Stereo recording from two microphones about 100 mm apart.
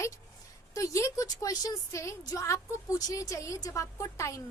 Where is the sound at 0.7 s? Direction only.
35° left (ahead or behind).